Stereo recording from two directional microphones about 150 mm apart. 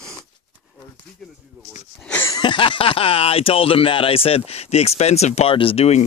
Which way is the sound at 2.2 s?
30° left (ahead or behind).